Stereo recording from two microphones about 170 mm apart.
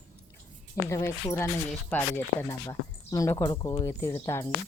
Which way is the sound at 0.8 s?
15° left (ahead or behind).